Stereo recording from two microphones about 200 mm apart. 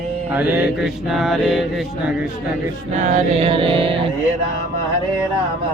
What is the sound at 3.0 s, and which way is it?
Music, 35° right (ahead or behind).